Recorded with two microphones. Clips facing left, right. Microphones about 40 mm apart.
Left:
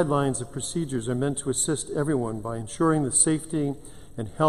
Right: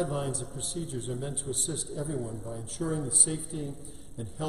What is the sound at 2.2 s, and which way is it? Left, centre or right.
Speech, left.